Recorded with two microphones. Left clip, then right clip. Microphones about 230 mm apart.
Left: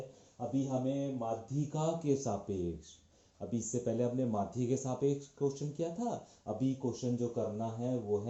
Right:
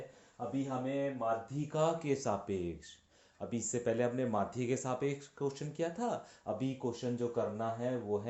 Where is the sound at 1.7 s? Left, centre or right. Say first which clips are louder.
Right 2 dB; right.